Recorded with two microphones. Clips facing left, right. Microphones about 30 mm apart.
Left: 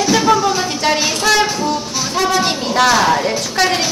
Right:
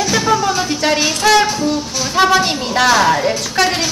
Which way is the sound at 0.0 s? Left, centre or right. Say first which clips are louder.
Left 2 dB; centre.